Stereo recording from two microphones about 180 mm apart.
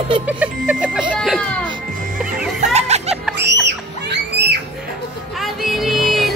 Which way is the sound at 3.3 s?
75° right (ahead or behind).